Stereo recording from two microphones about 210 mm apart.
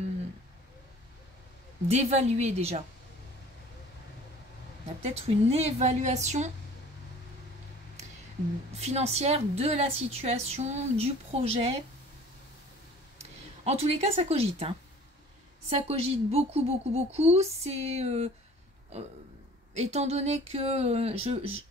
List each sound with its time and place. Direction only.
1.9 s a woman's voice: 30° right (ahead or behind)
5.0 s a woman's voice: 30° right (ahead or behind)
8.7 s a woman's voice: 30° right (ahead or behind)
13.2 s speech: 30° right (ahead or behind)
15.9 s a woman's voice: 30° right (ahead or behind)
19.7 s a woman's voice: 30° right (ahead or behind)